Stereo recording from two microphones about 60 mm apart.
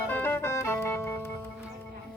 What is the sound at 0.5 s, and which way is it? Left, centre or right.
Music, left.